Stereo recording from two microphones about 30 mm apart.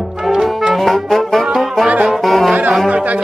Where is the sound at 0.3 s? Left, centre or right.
Centre.